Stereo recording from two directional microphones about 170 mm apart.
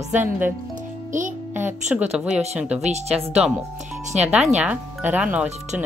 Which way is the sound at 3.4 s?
5° right (ahead or behind).